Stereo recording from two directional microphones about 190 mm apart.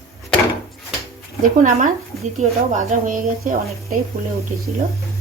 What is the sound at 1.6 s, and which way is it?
Speech, 45° right (ahead or behind).